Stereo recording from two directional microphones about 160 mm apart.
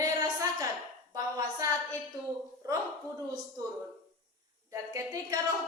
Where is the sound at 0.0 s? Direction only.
20° right (ahead or behind).